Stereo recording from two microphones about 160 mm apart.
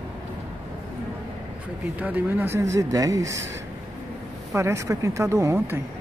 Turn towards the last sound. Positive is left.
turn(degrees=-20)  # may be behind; listen again after turning